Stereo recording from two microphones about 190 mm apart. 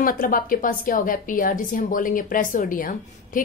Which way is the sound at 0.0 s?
45° left (ahead or behind).